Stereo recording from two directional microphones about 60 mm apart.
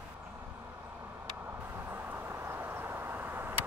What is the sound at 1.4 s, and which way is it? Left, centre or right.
Vehicle, right.